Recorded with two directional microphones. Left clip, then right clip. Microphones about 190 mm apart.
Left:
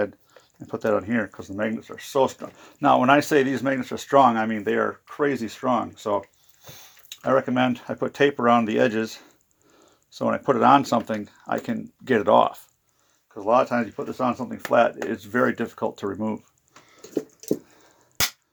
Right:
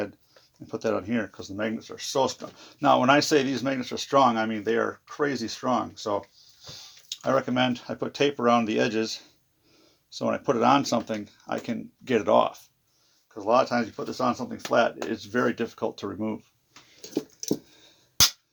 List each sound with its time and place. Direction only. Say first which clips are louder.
0.7 s speech: left 4 dB; 35° left (ahead or behind)
6.7 s drip: right 2 dB; 30° left (ahead or behind)
7.3 s speech: left 3 dB; 30° left (ahead or behind)